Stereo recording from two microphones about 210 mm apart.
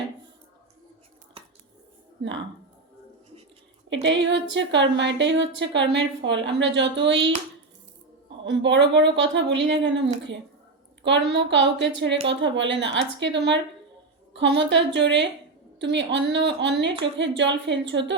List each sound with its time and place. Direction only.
4.0 s a woman's voice: 60° right (ahead or behind)
8.4 s a woman's voice: 60° right (ahead or behind)
11.0 s a woman's voice: 60° right (ahead or behind)